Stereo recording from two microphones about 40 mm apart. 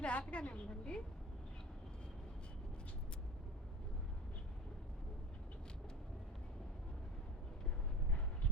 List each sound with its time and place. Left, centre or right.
0.0 s a woman's voice: left